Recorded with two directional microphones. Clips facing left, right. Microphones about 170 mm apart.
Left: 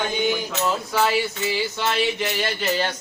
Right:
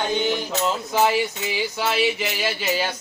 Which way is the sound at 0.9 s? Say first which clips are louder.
Right 3 dB; 20° right (ahead or behind).